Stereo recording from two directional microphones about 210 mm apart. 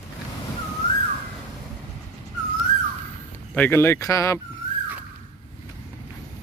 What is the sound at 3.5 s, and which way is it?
Speech, 10° left (ahead or behind).